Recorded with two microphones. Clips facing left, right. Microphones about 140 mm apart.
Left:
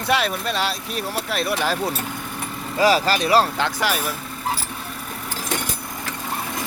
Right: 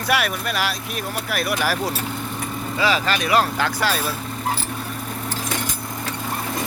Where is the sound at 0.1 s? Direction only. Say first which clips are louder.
Left 1 dB; 25° left (ahead or behind).